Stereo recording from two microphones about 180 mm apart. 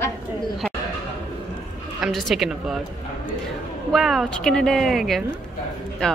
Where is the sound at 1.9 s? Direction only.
Centre (ahead or behind).